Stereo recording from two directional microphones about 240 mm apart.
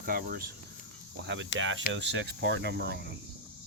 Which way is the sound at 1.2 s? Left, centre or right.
Right.